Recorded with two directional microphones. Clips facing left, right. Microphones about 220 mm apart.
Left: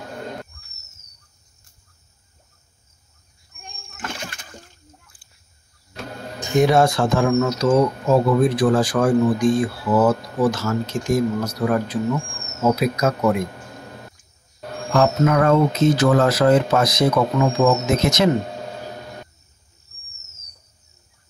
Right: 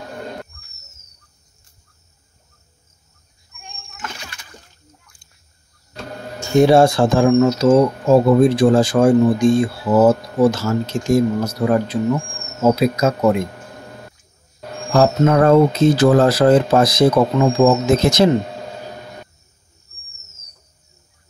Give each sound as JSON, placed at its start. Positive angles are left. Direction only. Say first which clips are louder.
{"t": 3.5, "sound": "splash", "louder": "right 1 dB", "side_deg": 45}
{"t": 6.6, "sound": "speech", "louder": "right 5 dB", "side_deg": -30}
{"t": 15.0, "sound": "speech", "louder": "right 3 dB", "side_deg": -35}